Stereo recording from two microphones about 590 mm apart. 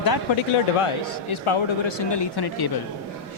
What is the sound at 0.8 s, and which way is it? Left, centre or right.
Speech, left.